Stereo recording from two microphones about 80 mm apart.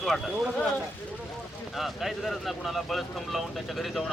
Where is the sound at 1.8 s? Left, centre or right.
Centre.